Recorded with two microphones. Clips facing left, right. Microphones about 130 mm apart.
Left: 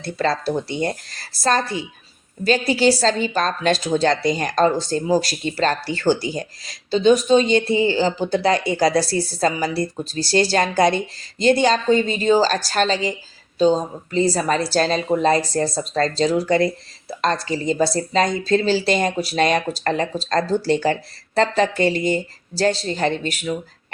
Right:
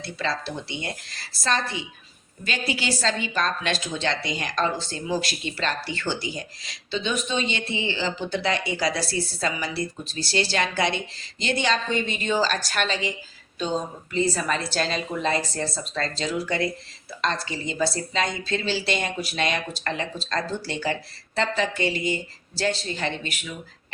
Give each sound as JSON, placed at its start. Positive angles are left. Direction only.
{"t": 0.0, "sound": "a woman's voice", "side_deg": 45}